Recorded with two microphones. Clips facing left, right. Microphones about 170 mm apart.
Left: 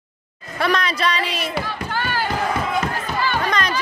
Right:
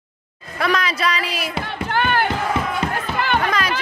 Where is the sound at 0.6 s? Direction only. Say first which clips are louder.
Even; centre (ahead or behind).